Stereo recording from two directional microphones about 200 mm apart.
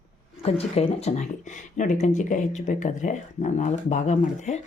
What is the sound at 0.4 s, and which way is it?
Speech, 30° left (ahead or behind).